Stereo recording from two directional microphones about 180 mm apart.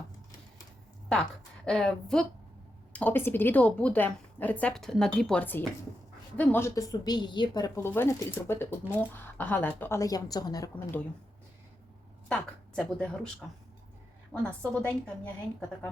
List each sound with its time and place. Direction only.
1.6 s a woman's voice: 5° left (ahead or behind)
12.3 s a woman's voice: 5° left (ahead or behind)
14.4 s a woman's voice: 5° left (ahead or behind)